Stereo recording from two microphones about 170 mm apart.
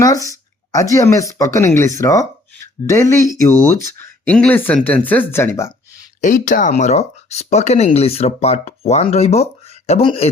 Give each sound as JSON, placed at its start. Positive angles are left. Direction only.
{"t": 0.0, "sound": "speech", "side_deg": 20}
{"t": 6.2, "sound": "speech", "side_deg": 50}